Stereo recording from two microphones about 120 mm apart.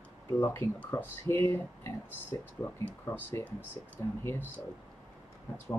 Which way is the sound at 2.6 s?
20° left (ahead or behind).